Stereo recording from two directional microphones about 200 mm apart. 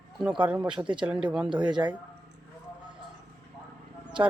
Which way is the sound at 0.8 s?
25° right (ahead or behind).